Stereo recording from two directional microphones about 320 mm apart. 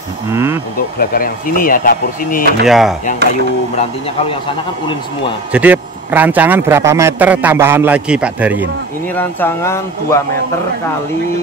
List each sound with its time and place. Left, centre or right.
0.3 s speech: centre
0.9 s speech: left
2.6 s a man's voice: centre
5.5 s a man's voice: centre
9.1 s speech: centre